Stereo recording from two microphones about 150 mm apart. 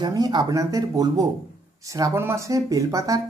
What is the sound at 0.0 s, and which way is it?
Speech, 30° right (ahead or behind).